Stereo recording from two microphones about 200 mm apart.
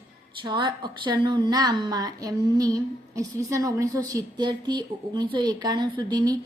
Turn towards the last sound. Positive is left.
turn(degrees=-20)  # may be behind; listen again after turning